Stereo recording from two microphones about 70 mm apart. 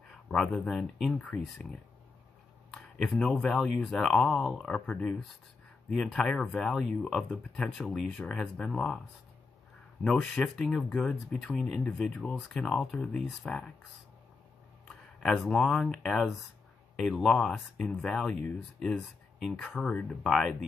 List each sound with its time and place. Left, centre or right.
0.1 s a sound: centre
0.7 s speech: centre
1.1 s speech: centre
2.7 s speech: centre
4.6 s speech: centre
5.9 s speech: centre
10.0 s speech: centre
15.4 s speech: centre